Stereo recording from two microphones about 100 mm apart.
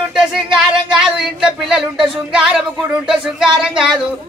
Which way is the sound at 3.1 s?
5° right (ahead or behind).